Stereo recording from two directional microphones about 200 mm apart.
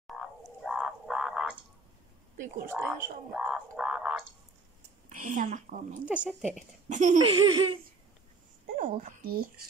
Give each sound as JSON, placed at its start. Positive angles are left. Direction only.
{"t": 0.0, "sound": "frog", "side_deg": 0}
{"t": 2.7, "sound": "speech", "side_deg": -10}
{"t": 5.1, "sound": "speech", "side_deg": -40}
{"t": 6.0, "sound": "speech", "side_deg": -5}
{"t": 6.9, "sound": "speech", "side_deg": -35}
{"t": 7.2, "sound": "laughter", "side_deg": -25}
{"t": 8.7, "sound": "a woman's voice", "side_deg": -45}